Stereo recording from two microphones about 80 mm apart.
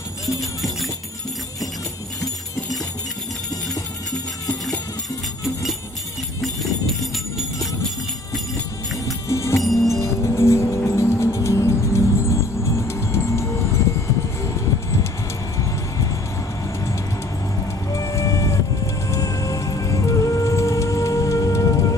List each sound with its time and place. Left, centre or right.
0.4 s music: centre
5.4 s jingle bell: centre
9.0 s music: left
17.9 s music: left